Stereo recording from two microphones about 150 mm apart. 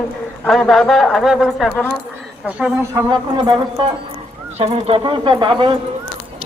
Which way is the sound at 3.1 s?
30° right (ahead or behind).